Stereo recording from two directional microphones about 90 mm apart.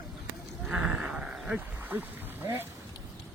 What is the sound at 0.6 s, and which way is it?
Sheep, 10° right (ahead or behind).